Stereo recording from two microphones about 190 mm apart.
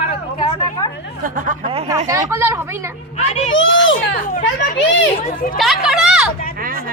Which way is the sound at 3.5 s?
80° left.